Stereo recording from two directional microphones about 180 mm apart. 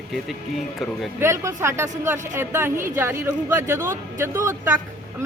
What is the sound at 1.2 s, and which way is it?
Speech, 15° right (ahead or behind).